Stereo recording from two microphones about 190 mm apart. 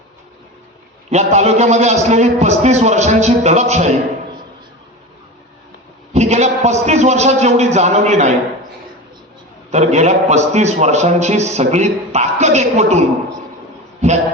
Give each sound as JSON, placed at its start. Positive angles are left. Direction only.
{"t": 1.1, "sound": "a man's voice", "side_deg": -35}
{"t": 6.1, "sound": "a man's voice", "side_deg": -35}
{"t": 9.7, "sound": "a man's voice", "side_deg": -35}